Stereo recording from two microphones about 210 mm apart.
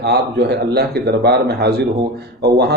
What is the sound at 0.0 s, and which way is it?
A man's voice, 55° right (ahead or behind).